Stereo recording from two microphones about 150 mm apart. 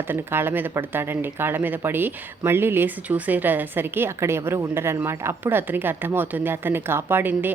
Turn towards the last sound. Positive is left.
turn(degrees=-15)  # may be behind; listen again after turning